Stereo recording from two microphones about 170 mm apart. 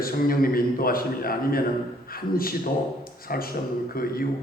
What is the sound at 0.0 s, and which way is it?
A man's voice, 60° left (ahead or behind).